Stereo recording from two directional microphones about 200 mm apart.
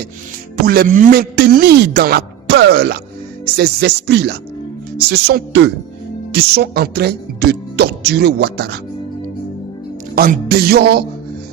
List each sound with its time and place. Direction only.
0.6 s a man's voice: 45° right (ahead or behind)
10.2 s a man's voice: 50° right (ahead or behind)